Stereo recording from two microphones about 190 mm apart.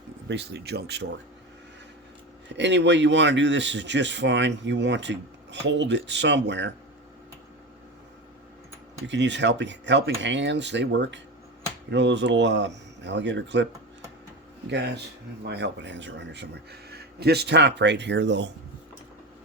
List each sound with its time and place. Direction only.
0.3 s speech: 60° right (ahead or behind)
2.6 s speech: 65° right (ahead or behind)
9.0 s speech: 70° right (ahead or behind)
15.4 s speech: 65° right (ahead or behind)